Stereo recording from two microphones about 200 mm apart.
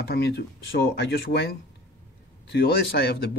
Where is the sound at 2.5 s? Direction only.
55° left (ahead or behind).